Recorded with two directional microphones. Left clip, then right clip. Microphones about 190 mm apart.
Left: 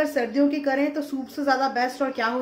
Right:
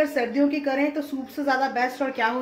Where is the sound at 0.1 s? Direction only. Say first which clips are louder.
Even; 5° left (ahead or behind).